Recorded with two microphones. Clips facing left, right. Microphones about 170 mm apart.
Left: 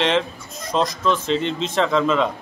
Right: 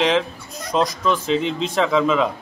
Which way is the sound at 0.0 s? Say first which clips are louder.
Right 1 dB; centre (ahead or behind).